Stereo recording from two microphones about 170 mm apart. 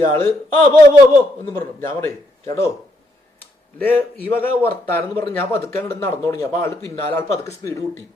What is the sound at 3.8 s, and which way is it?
Speech, 10° left (ahead or behind).